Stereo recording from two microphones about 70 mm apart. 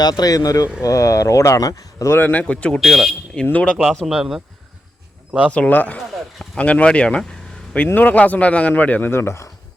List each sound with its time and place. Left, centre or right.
0.0 s speech: left
2.1 s a man's voice: left
2.4 s speech: centre
2.8 s speech: centre
4.0 s speech: centre
5.5 s a man's voice: left